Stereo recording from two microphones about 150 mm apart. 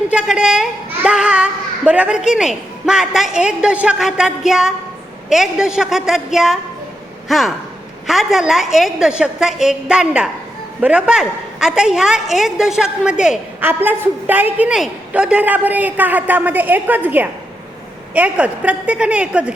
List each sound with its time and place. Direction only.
0.1 s a woman's voice: 5° right (ahead or behind)